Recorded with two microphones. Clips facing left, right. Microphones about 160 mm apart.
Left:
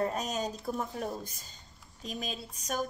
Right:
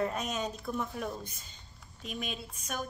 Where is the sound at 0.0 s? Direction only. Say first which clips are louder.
Left 1 dB; 35° left (ahead or behind).